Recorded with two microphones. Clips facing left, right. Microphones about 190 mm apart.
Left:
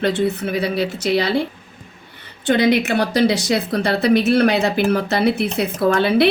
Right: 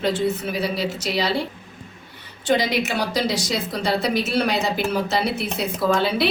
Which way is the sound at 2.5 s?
60° left (ahead or behind).